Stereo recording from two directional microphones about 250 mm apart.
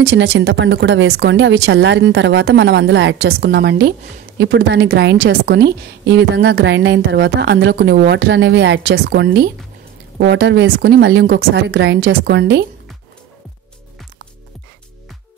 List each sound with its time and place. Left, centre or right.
0.0 s a woman's voice: right